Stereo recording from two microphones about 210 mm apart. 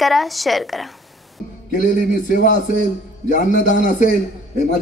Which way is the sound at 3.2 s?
35° left (ahead or behind).